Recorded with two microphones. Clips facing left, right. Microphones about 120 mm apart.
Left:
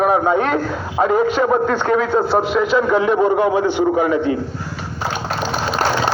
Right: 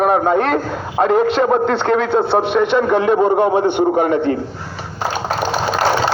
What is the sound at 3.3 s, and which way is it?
Speech, 50° right (ahead or behind).